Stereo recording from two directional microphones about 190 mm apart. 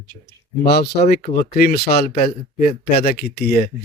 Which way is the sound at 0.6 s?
55° left (ahead or behind).